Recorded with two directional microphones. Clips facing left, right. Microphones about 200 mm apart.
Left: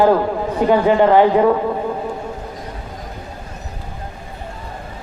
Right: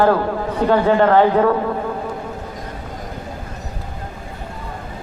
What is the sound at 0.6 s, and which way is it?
Speech, 15° left (ahead or behind).